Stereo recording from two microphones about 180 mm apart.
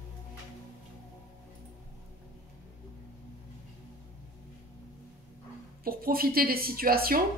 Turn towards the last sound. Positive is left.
turn(degrees=-55)  # may be behind; listen again after turning